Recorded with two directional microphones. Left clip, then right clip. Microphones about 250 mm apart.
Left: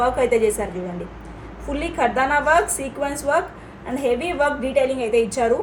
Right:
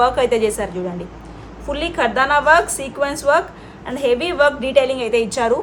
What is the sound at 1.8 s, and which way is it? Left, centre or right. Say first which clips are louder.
A woman's voice: right 2 dB; centre.